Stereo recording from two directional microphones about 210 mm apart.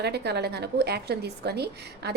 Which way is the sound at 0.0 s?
50° right (ahead or behind).